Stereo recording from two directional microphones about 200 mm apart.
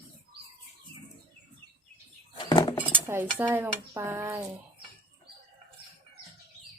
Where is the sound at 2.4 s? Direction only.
20° left (ahead or behind).